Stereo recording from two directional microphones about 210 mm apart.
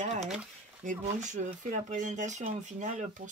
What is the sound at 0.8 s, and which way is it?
Speech, 35° right (ahead or behind).